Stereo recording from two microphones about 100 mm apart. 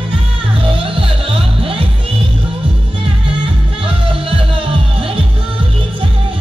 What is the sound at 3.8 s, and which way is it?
Music, 65° right (ahead or behind).